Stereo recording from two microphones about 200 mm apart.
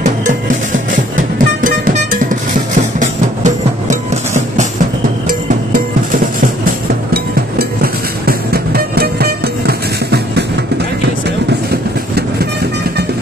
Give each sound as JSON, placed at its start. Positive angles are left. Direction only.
{"t": 1.1, "sound": "music", "side_deg": -40}
{"t": 7.5, "sound": "music", "side_deg": -50}
{"t": 11.7, "sound": "vehicle", "side_deg": -50}